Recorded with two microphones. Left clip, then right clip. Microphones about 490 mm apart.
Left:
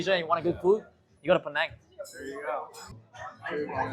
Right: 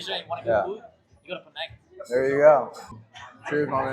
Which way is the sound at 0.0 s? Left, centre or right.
Left.